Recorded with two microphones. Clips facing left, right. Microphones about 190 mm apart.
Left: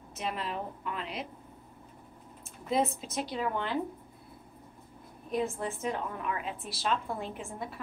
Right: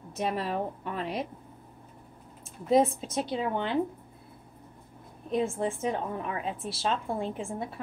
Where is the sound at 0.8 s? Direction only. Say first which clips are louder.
Right 4 dB; 40° right (ahead or behind).